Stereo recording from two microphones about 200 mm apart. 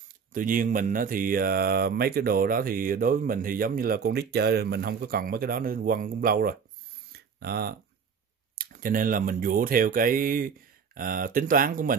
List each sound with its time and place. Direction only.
0.3 s speech: 45° right (ahead or behind)
7.1 s a sound: 50° right (ahead or behind)
8.5 s speech: 45° right (ahead or behind)